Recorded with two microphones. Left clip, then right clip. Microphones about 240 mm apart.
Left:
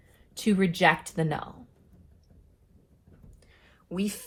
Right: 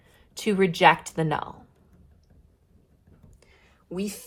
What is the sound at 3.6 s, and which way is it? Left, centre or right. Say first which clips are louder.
Whispering: right 1 dB; right.